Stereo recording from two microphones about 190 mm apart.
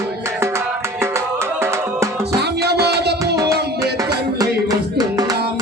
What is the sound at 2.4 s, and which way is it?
Music, 60° right (ahead or behind).